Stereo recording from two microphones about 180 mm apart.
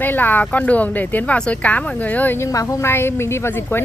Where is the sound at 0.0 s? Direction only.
10° left (ahead or behind).